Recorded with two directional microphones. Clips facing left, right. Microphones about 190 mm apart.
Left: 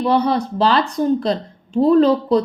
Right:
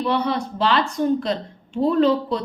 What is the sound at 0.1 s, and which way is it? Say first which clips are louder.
A woman's voice: left 7 dB; 35° left (ahead or behind).